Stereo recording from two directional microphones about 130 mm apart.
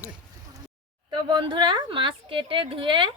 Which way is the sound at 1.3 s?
35° right (ahead or behind).